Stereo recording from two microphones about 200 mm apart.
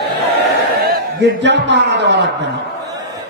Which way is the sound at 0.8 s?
50° right (ahead or behind).